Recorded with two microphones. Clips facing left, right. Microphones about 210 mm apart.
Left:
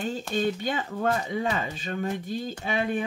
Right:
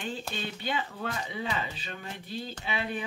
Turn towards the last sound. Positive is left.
turn(degrees=45)  # may be behind; listen again after turning